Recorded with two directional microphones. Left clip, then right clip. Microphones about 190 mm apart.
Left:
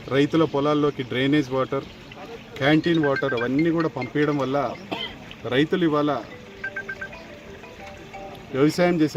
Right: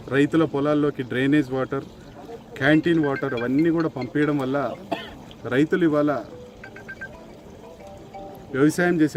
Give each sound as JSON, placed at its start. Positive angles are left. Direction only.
{"t": 0.1, "sound": "speech", "side_deg": -30}
{"t": 8.5, "sound": "speech", "side_deg": -30}